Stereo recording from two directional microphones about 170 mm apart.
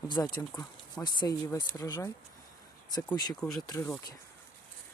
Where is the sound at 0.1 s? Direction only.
20° left (ahead or behind).